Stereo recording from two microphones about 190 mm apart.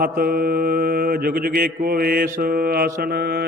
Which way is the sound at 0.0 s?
50° right (ahead or behind).